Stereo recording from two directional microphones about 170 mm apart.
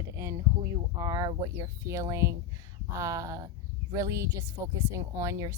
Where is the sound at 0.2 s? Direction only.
15° right (ahead or behind).